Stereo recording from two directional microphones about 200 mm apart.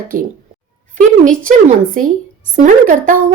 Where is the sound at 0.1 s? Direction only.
45° right (ahead or behind).